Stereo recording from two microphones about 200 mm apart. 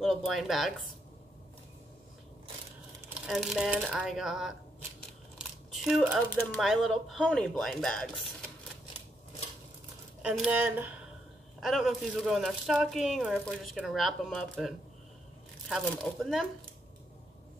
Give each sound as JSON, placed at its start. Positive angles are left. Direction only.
{"t": 0.0, "sound": "speech", "side_deg": 0}
{"t": 3.2, "sound": "speech", "side_deg": 0}
{"t": 5.7, "sound": "speech", "side_deg": 0}
{"t": 10.2, "sound": "speech", "side_deg": -5}